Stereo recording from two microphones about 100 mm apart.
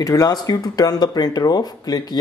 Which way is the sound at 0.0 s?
35° left (ahead or behind).